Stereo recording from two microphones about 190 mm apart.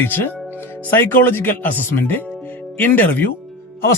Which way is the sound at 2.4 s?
10° left (ahead or behind).